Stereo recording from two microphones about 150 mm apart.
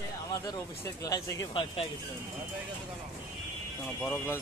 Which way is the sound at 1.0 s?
25° left (ahead or behind).